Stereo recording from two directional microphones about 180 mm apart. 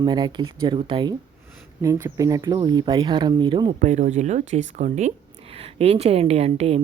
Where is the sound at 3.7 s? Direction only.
45° right (ahead or behind).